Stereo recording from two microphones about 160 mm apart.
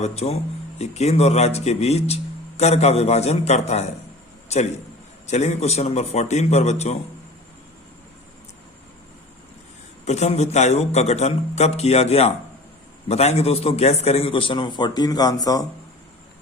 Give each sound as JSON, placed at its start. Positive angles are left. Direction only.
{"t": 0.0, "sound": "a man's voice", "side_deg": 40}
{"t": 10.1, "sound": "a man's voice", "side_deg": 45}